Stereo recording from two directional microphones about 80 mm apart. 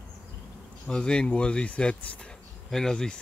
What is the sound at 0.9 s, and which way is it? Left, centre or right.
Speech, centre.